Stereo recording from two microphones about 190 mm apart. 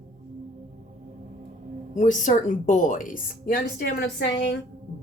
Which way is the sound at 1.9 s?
40° left (ahead or behind).